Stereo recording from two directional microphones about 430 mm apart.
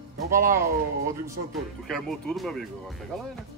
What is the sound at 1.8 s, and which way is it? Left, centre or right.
Speech, centre.